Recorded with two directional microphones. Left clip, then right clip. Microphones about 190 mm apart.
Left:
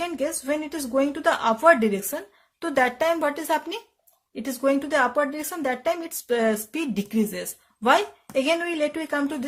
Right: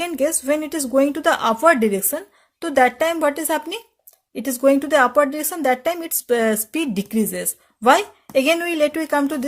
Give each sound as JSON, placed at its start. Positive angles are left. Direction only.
{"t": 0.0, "sound": "a woman's voice", "side_deg": -30}